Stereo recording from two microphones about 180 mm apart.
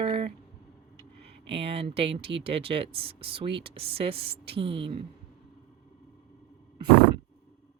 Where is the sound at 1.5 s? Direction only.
30° right (ahead or behind).